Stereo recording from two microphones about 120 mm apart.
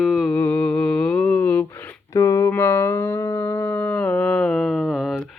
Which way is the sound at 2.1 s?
25° left (ahead or behind).